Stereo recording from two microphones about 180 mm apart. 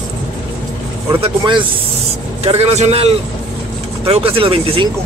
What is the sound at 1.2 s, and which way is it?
A man's voice, 25° right (ahead or behind).